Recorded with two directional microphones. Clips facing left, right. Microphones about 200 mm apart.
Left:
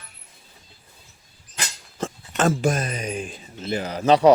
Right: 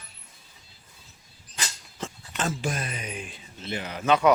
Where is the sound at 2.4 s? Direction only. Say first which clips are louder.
Left 9 dB; 45° left (ahead or behind).